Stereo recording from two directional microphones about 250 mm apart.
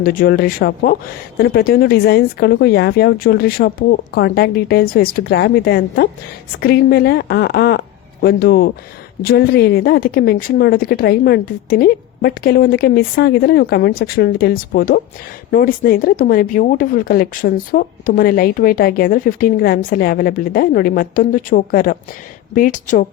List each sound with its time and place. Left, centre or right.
0.0 s speech: left